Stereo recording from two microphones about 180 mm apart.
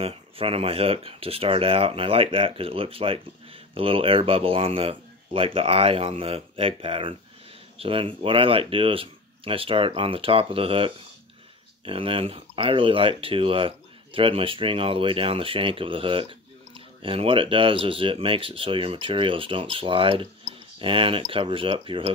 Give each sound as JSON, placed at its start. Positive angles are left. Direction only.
{"t": 0.0, "sound": "speech", "side_deg": -30}